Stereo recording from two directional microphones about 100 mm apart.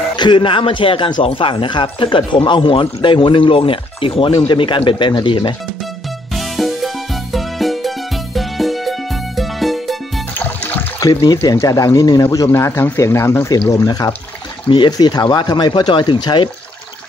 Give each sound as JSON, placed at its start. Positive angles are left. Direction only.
{"t": 0.1, "sound": "speech", "side_deg": 50}
{"t": 6.3, "sound": "music", "side_deg": 0}
{"t": 11.0, "sound": "speech", "side_deg": 35}
{"t": 12.4, "sound": "speech", "side_deg": 25}